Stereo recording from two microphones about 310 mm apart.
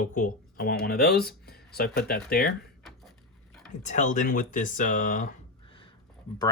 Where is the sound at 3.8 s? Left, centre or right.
Left.